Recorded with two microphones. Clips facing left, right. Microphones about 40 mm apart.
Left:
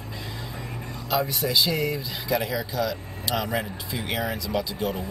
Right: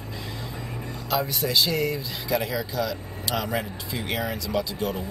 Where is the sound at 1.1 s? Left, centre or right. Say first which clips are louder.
Left 1 dB; centre.